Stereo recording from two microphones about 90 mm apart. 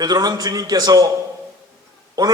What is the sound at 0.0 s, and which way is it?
A man's voice, 45° right (ahead or behind).